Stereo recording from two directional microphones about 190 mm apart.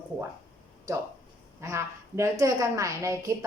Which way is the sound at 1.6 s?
15° right (ahead or behind).